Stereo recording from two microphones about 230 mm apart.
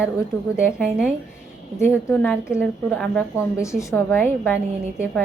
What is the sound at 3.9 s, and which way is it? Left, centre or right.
Speech, centre.